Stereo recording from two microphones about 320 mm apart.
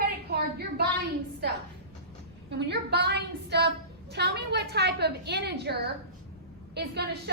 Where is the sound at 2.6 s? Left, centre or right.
Right.